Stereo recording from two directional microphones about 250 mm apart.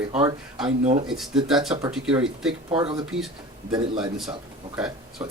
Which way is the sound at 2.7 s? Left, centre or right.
Right.